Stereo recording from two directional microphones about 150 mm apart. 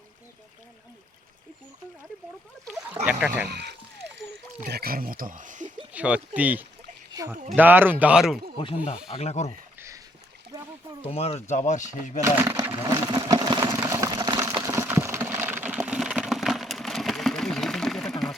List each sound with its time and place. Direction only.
3.1 s speech: 10° right (ahead or behind)
3.5 s speech: 90° right; by 5.7 s 55° right (ahead or behind)
5.9 s speech: 10° right (ahead or behind)
7.1 s speech: 25° right (ahead or behind)
7.5 s speech: 10° right (ahead or behind)
8.5 s speech: 40° left (ahead or behind)
9.7 s a sound: 20° right (ahead or behind)
11.0 s speech: 45° left (ahead or behind)
12.2 s speech: 20° right (ahead or behind)
13.1 s a sound: 25° right (ahead or behind); by 18.3 s centre (ahead or behind)